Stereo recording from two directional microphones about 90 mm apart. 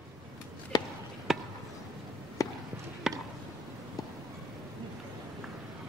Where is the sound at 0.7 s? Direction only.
45° left (ahead or behind).